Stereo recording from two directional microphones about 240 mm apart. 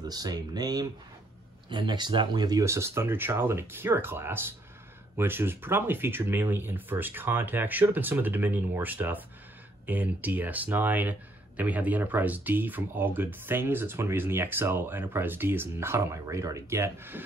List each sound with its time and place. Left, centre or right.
0.0 s speech: centre